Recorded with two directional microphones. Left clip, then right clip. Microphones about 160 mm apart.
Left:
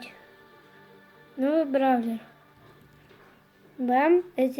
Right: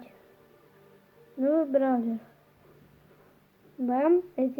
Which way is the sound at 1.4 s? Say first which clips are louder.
Left 1 dB; 5° right (ahead or behind).